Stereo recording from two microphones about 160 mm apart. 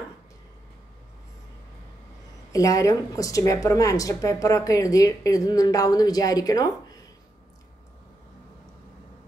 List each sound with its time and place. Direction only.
2.5 s speech: 20° left (ahead or behind)